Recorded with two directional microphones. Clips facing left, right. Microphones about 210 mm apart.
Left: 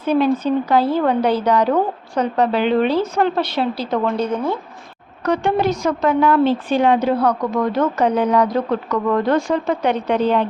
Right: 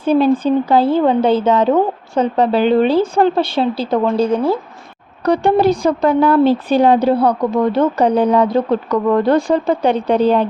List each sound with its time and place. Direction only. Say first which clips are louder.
0.0 s speech: right 4 dB; 30° right (ahead or behind)